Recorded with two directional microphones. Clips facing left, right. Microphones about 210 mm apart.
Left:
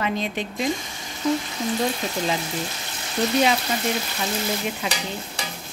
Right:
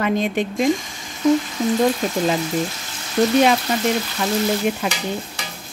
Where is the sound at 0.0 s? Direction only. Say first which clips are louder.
Right 6 dB; 50° right (ahead or behind).